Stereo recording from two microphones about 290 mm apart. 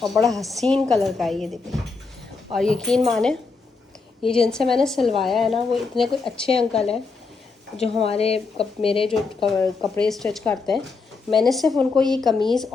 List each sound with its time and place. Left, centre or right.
0.0 s a woman's voice: centre
4.4 s a woman's voice: centre
7.8 s speech: centre
9.5 s a woman's voice: centre